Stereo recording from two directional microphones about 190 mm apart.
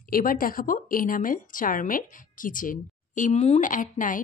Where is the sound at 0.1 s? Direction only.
50° left (ahead or behind).